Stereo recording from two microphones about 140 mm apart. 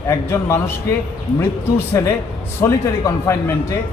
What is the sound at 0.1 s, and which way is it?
Speech, 20° left (ahead or behind).